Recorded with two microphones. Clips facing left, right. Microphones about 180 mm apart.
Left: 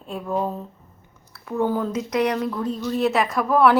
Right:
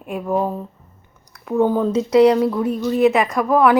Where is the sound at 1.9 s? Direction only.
30° right (ahead or behind).